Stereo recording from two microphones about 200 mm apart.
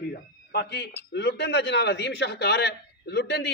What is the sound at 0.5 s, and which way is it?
A man's voice, 55° left (ahead or behind).